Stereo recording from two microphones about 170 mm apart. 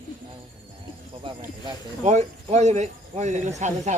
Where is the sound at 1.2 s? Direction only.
30° right (ahead or behind).